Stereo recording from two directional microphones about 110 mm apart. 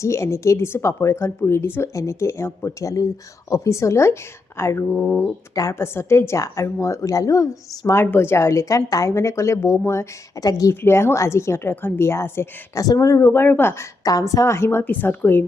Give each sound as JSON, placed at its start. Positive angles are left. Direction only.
{"t": 0.0, "sound": "speech", "side_deg": 25}
{"t": 14.0, "sound": "speech", "side_deg": 35}